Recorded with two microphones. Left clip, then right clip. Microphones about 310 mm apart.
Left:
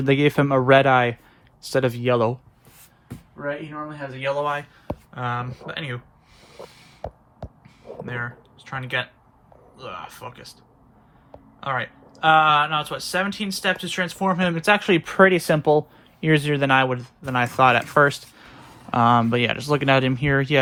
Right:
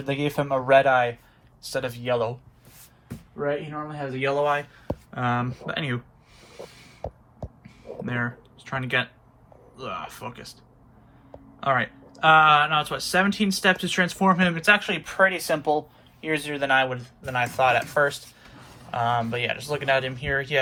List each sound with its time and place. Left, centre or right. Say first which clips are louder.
0.0 s speech: left 7 dB; left
3.8 s speech: left 1 dB; centre
6.4 s snort: left 1 dB; centre
8.0 s speech: right 2 dB; centre
11.6 s speech: right 3 dB; centre